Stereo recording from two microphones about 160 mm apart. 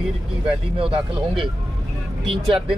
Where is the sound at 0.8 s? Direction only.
35° right (ahead or behind).